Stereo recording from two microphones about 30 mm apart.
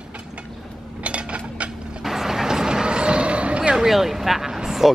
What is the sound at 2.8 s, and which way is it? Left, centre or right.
Vehicle, right.